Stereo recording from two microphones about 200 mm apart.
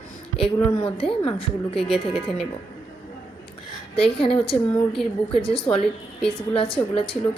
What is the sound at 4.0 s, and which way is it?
Speech, 30° left (ahead or behind).